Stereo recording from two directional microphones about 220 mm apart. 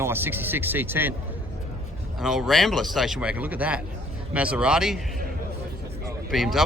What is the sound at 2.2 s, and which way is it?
Speech, centre (ahead or behind).